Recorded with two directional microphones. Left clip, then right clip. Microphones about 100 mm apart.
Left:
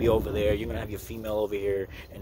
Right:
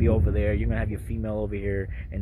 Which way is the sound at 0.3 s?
45° left (ahead or behind).